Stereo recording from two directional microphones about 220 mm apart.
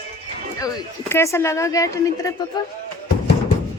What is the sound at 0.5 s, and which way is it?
Speech, 10° left (ahead or behind).